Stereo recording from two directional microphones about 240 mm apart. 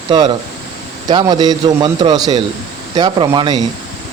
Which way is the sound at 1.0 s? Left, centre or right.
Centre.